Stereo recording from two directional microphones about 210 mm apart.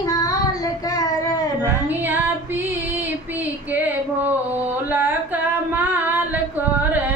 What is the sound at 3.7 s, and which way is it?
Female singing, 10° right (ahead or behind).